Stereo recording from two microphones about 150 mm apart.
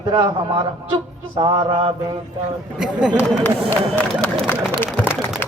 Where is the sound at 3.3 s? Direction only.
10° left (ahead or behind).